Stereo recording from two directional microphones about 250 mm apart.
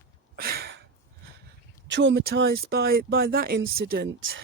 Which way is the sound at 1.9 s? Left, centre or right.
Right.